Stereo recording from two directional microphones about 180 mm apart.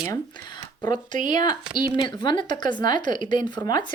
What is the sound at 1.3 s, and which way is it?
Speech, 25° left (ahead or behind).